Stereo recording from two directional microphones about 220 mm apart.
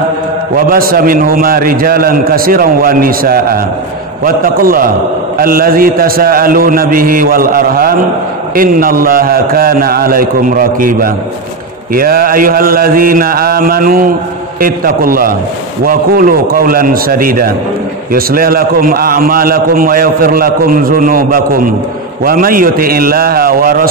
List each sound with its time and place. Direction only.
0.7 s a man's voice: 40° right (ahead or behind)